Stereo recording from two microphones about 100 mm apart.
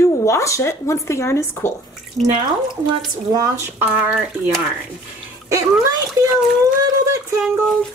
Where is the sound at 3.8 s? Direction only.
15° right (ahead or behind).